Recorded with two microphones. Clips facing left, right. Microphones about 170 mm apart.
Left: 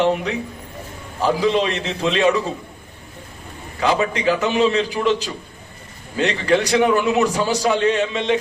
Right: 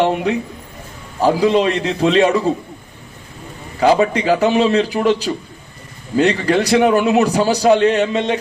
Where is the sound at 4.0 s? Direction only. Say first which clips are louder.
Right 5 dB; 35° right (ahead or behind).